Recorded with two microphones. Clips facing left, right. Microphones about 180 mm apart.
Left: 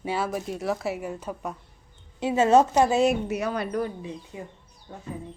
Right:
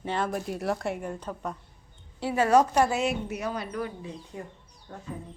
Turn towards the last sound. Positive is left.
turn(degrees=10)  # may be behind; listen again after turning